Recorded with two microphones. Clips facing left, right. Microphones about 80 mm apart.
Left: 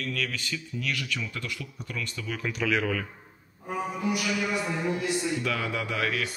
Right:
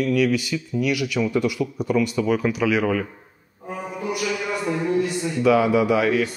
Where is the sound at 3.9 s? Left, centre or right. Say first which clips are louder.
Right 5 dB; right.